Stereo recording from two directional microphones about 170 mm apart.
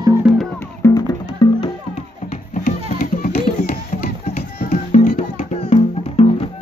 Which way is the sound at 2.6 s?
50° left (ahead or behind).